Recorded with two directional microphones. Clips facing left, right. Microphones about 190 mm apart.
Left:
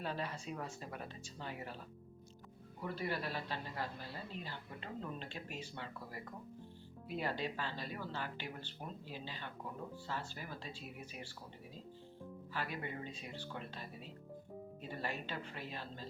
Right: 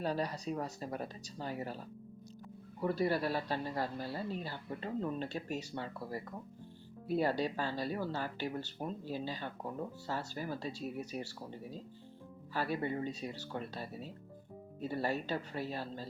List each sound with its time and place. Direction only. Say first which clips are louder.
0.0 s speech: right 6 dB; 40° right (ahead or behind)
2.8 s speech: right 8 dB; 40° right (ahead or behind)
12.5 s speech: right 8 dB; 40° right (ahead or behind)